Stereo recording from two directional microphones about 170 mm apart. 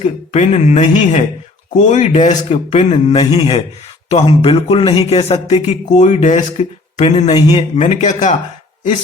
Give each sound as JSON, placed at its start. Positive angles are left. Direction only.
{"t": 0.3, "sound": "speech", "side_deg": 40}
{"t": 7.8, "sound": "a man's voice", "side_deg": 40}